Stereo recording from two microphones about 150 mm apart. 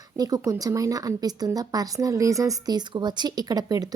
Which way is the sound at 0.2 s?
25° right (ahead or behind).